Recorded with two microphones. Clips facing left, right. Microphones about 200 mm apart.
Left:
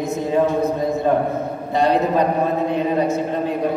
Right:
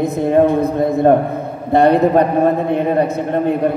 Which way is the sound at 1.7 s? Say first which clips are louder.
Right 6 dB; 60° right (ahead or behind).